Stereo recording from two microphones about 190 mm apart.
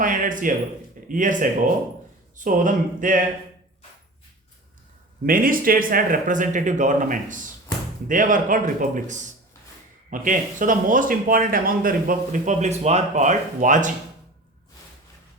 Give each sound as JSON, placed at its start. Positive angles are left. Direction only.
{"t": 0.0, "sound": "a sound", "side_deg": -45}
{"t": 1.0, "sound": "speech", "side_deg": -45}
{"t": 5.2, "sound": "speech", "side_deg": -50}